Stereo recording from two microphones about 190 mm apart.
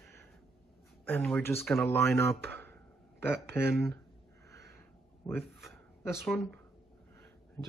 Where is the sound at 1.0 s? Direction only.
10° left (ahead or behind).